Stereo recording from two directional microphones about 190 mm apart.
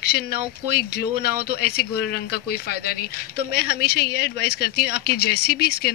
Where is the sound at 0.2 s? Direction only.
55° left (ahead or behind).